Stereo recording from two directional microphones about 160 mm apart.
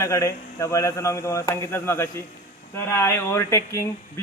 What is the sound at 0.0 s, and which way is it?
A man's voice, 20° left (ahead or behind).